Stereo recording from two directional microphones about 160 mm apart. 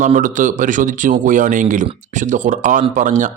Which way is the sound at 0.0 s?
55° right (ahead or behind).